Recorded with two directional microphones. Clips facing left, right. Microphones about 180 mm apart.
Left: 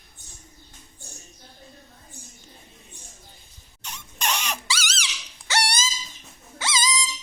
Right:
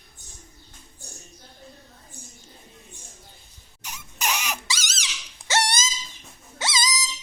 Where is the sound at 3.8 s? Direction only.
10° right (ahead or behind).